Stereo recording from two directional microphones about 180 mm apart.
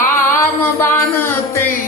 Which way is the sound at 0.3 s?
15° left (ahead or behind).